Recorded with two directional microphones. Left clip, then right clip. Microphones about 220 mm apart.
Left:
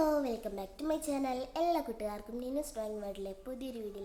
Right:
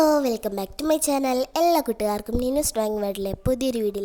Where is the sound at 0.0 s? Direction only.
45° right (ahead or behind).